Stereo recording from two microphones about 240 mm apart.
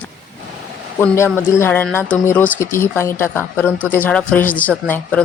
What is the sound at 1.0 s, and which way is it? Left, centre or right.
Speech, centre.